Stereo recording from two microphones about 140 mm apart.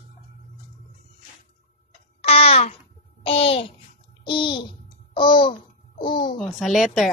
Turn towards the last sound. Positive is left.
turn(degrees=0)  # may be behind; listen again after turning